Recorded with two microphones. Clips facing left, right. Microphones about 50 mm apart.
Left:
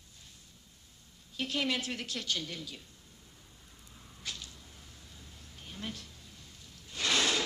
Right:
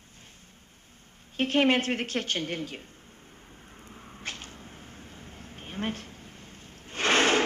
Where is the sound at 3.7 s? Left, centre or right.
Right.